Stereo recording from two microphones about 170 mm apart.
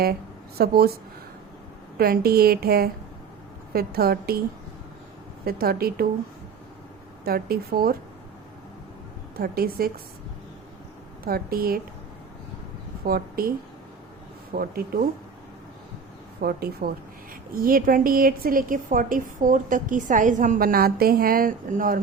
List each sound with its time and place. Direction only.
0.6 s a woman's voice: 65° right (ahead or behind)
2.0 s a woman's voice: 65° right (ahead or behind)
5.5 s a woman's voice: 65° right (ahead or behind)
7.3 s a woman's voice: 65° right (ahead or behind)
9.3 s a woman's voice: 65° right (ahead or behind)
11.3 s a woman's voice: 60° right (ahead or behind)
13.1 s speech: 60° right (ahead or behind)
14.5 s a woman's voice: 60° right (ahead or behind)
16.4 s a woman's voice: 65° right (ahead or behind)